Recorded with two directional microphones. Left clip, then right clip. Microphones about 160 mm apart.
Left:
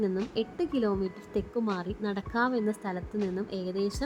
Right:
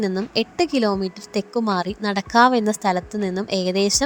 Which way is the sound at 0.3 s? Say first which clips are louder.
Right 10 dB; 30° right (ahead or behind).